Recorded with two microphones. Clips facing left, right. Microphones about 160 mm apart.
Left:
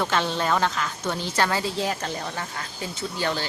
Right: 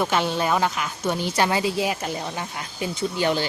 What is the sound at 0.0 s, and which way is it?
A woman's voice, 10° right (ahead or behind).